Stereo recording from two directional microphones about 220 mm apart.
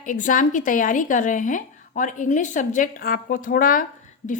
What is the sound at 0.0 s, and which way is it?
A woman's voice, 35° left (ahead or behind).